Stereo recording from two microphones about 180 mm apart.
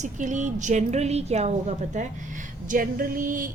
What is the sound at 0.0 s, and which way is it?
A woman's voice, 45° right (ahead or behind).